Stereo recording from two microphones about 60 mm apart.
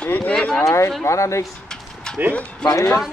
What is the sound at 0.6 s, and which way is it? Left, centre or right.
Speech, left.